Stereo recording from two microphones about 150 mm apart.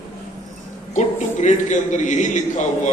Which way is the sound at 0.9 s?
50° left (ahead or behind).